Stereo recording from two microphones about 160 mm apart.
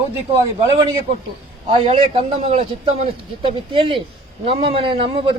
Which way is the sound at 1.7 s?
35° right (ahead or behind).